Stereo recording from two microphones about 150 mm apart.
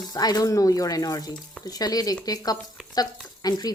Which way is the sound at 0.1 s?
25° left (ahead or behind).